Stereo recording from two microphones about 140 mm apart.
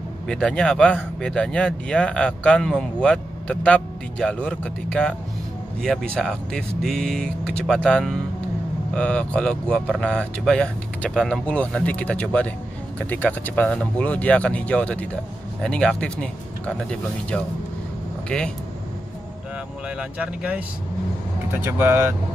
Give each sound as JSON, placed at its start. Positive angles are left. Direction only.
{"t": 0.3, "sound": "speech", "side_deg": 5}
{"t": 20.0, "sound": "speech", "side_deg": -10}